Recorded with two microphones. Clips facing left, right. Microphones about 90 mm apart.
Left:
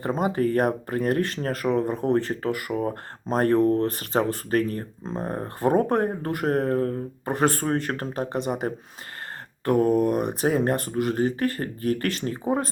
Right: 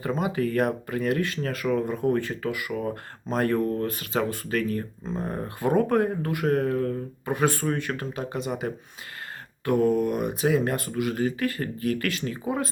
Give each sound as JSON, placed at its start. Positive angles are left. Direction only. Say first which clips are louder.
{"t": 0.0, "sound": "speech", "louder": "left 3 dB", "side_deg": 40}